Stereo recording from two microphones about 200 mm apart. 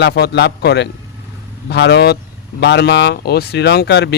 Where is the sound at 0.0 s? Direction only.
55° left (ahead or behind).